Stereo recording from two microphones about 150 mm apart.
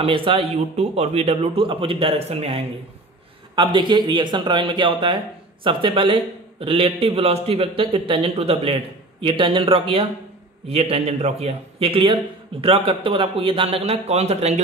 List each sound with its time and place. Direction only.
0.0 s a man's voice: 35° right (ahead or behind)
3.5 s a man's voice: 30° right (ahead or behind)